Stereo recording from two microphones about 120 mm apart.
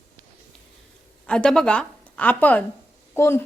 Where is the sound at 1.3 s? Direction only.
5° left (ahead or behind).